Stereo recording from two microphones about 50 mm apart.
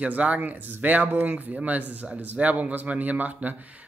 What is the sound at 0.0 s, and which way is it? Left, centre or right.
Speech, right.